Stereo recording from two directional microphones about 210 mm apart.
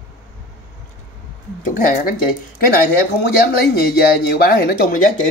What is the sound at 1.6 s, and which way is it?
Speech, 40° left (ahead or behind).